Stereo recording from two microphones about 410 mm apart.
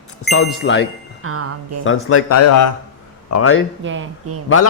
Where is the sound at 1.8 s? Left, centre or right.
Left.